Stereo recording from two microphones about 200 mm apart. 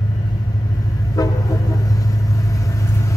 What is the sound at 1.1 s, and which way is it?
Vehicle, 20° left (ahead or behind).